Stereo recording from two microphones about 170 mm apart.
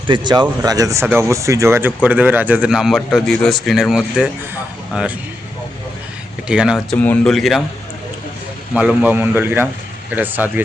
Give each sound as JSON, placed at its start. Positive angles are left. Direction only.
{"t": 0.1, "sound": "speech", "side_deg": -25}
{"t": 6.5, "sound": "speech", "side_deg": -5}
{"t": 6.9, "sound": "speech", "side_deg": 10}
{"t": 8.7, "sound": "speech", "side_deg": -5}